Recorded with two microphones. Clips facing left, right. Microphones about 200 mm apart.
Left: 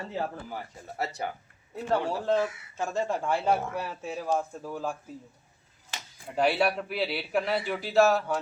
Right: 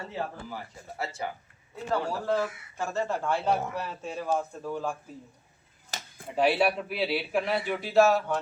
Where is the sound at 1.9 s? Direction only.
20° left (ahead or behind).